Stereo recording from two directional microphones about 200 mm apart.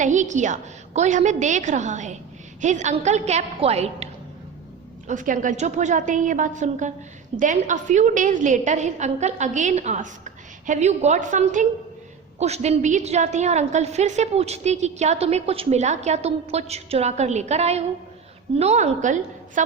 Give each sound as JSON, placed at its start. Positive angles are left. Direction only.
{"t": 0.0, "sound": "a woman's voice", "side_deg": -40}